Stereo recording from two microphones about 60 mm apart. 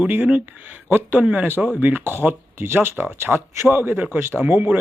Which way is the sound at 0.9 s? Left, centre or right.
Right.